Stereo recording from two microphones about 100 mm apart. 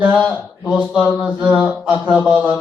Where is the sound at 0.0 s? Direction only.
15° right (ahead or behind).